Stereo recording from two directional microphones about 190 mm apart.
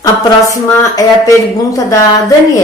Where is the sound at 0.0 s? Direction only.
15° left (ahead or behind).